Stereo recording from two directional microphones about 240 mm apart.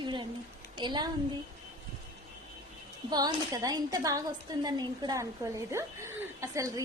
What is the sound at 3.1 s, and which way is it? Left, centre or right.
A woman's voice, centre.